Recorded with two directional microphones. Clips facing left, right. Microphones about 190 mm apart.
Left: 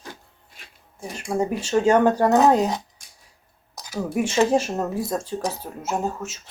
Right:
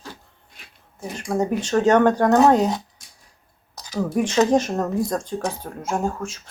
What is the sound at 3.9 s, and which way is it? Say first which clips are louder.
Speech: right 2 dB; 10° left (ahead or behind).